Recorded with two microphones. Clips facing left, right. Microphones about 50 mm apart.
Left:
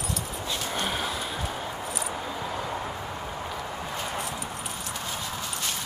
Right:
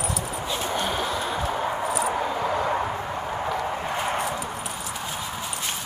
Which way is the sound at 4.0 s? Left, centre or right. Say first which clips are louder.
Right 6 dB; right.